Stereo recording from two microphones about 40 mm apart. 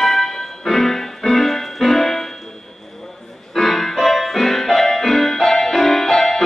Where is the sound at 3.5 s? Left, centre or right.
Centre.